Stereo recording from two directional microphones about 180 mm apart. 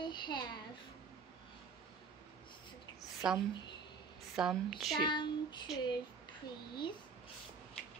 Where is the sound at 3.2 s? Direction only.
5° right (ahead or behind).